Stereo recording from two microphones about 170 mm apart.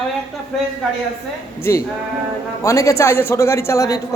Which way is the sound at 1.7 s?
15° left (ahead or behind).